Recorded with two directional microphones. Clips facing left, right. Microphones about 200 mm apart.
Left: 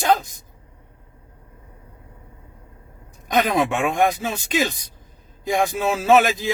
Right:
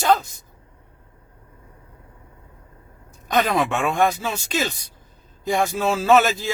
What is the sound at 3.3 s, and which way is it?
Speech, 15° left (ahead or behind).